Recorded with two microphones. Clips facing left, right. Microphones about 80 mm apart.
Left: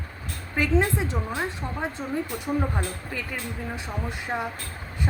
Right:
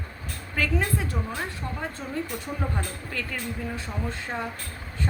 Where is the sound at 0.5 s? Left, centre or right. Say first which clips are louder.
Left 4 dB; left.